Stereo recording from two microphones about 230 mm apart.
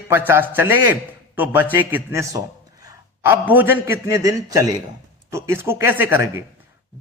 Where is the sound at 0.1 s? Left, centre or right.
Centre.